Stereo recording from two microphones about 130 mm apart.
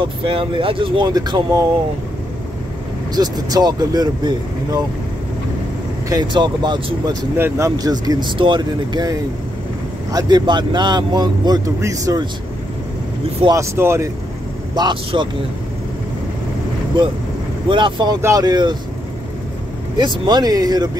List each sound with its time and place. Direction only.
0.0 s a man's voice: 45° right (ahead or behind)
3.2 s a man's voice: 30° right (ahead or behind)
6.0 s a man's voice: 35° right (ahead or behind)
7.3 s a man's voice: 20° right (ahead or behind)
13.5 s speech: 20° right (ahead or behind)
14.8 s a man's voice: 35° right (ahead or behind)
17.6 s a man's voice: 40° right (ahead or behind)
20.0 s a man's voice: 35° right (ahead or behind)